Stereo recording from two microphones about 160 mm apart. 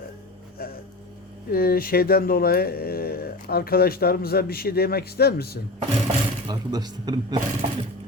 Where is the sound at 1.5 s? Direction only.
70° left (ahead or behind).